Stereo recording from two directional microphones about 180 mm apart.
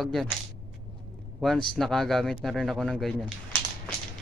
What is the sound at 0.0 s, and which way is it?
Speech, centre (ahead or behind).